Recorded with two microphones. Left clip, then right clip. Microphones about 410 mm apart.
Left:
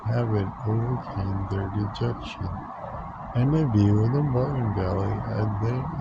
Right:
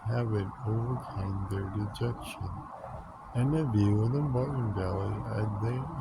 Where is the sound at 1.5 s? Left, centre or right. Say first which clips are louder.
Left 6 dB; right.